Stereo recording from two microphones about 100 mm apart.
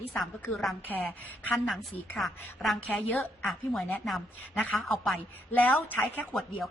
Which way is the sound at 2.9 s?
15° left (ahead or behind).